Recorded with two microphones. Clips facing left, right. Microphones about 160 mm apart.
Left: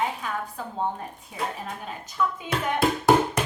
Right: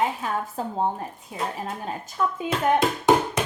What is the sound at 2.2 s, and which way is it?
Speech, 45° right (ahead or behind).